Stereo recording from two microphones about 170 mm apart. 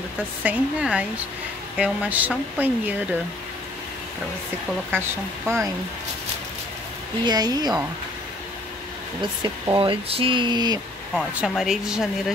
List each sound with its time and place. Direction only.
0.4 s speech: 10° right (ahead or behind)
4.9 s speech: 15° right (ahead or behind)
7.2 s speech: 25° right (ahead or behind)
9.2 s speech: 30° right (ahead or behind)
11.1 s speech: centre (ahead or behind)